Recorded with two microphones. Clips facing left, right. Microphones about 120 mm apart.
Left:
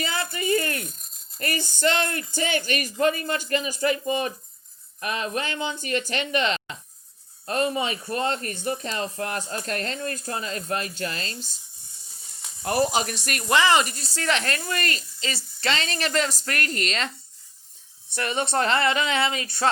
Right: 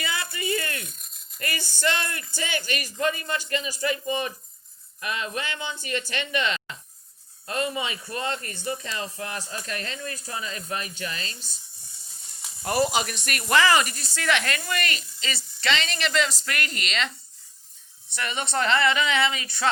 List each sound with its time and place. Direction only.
0.0 s rattle: 40° left (ahead or behind)
2.3 s speech: 40° left (ahead or behind)
12.6 s speech: 45° left (ahead or behind)
13.5 s speech: 20° left (ahead or behind); by 17.1 s 40° left (ahead or behind)
18.1 s speech: 45° left (ahead or behind)